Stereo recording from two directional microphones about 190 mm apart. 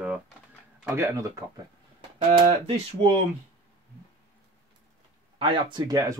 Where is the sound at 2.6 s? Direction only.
30° right (ahead or behind).